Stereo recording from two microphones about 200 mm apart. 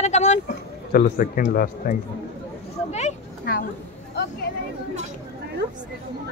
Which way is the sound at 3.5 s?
45° left (ahead or behind).